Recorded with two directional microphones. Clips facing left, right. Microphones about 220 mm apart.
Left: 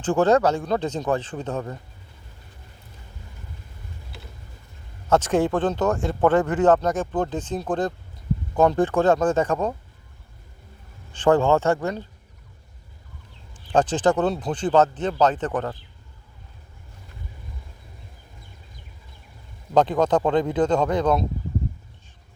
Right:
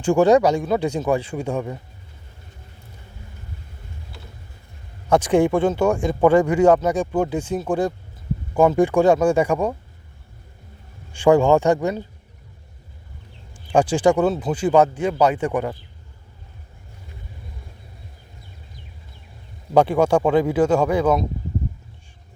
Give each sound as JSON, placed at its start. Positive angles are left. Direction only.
{"t": 0.0, "sound": "speech", "side_deg": -15}
{"t": 5.0, "sound": "speech", "side_deg": -15}
{"t": 11.1, "sound": "speech", "side_deg": -10}
{"t": 13.7, "sound": "speech", "side_deg": -10}
{"t": 19.7, "sound": "speech", "side_deg": -10}